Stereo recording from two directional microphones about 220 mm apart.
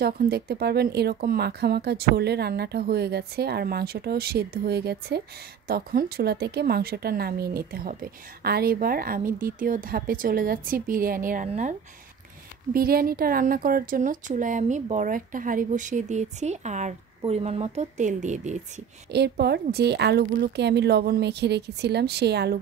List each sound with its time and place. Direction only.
0.0 s a woman's voice: 45° right (ahead or behind)
12.7 s a woman's voice: 40° right (ahead or behind)
19.1 s speech: 50° right (ahead or behind)